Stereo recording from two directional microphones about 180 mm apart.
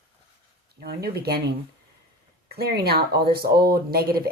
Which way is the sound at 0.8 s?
60° right (ahead or behind).